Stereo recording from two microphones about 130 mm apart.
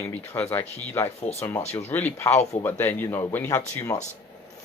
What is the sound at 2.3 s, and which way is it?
Speech, 55° left (ahead or behind).